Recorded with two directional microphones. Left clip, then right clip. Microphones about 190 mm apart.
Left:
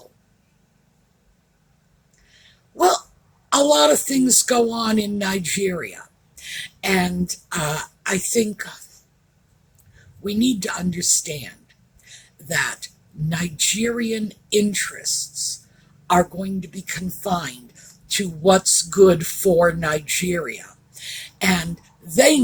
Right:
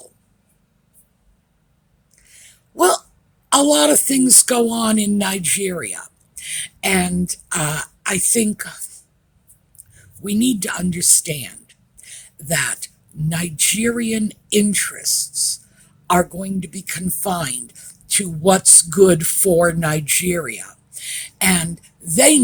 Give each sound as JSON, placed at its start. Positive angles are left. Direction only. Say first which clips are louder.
{"t": 2.4, "sound": "a sound", "louder": "right 1 dB", "side_deg": -50}
{"t": 3.5, "sound": "speech", "louder": "right 1 dB", "side_deg": -50}
{"t": 10.2, "sound": "speech", "louder": "right 2 dB", "side_deg": -50}